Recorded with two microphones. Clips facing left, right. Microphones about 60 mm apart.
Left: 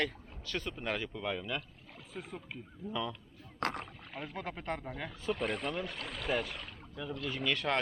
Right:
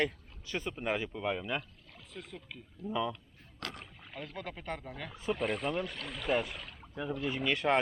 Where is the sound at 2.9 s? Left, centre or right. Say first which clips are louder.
Right 4 dB; centre.